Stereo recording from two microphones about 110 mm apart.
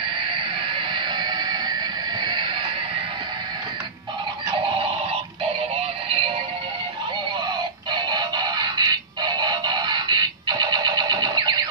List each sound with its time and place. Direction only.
0.3 s music: 45° right (ahead or behind)
6.0 s music: 60° right (ahead or behind)
7.9 s music: 40° right (ahead or behind)